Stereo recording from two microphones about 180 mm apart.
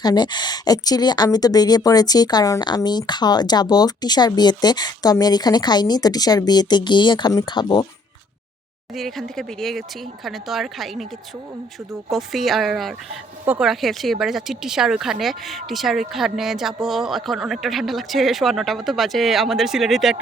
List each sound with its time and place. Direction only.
0.0 s speech: 25° left (ahead or behind)
9.0 s speech: centre (ahead or behind)
12.1 s speech: centre (ahead or behind)